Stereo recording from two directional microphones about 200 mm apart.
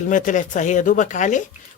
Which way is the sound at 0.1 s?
40° left (ahead or behind).